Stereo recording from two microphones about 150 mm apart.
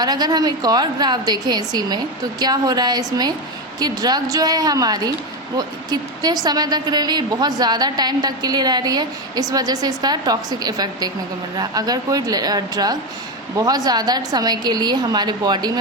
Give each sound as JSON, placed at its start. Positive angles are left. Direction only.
{"t": 0.0, "sound": "a woman's voice", "side_deg": -25}